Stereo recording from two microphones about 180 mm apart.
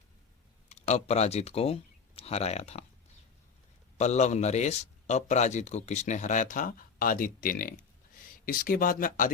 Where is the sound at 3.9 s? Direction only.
40° left (ahead or behind).